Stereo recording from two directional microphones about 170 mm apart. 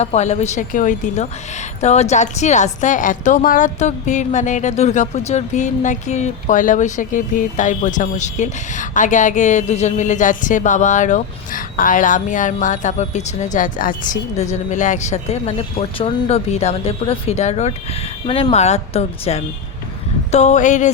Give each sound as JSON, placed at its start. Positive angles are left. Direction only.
{"t": 0.0, "sound": "a woman's voice", "side_deg": 40}